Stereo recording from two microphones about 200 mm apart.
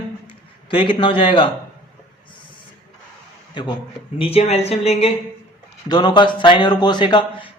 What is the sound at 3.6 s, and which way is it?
A man's voice, 20° left (ahead or behind).